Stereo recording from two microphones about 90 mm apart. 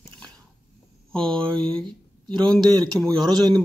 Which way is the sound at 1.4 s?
10° left (ahead or behind).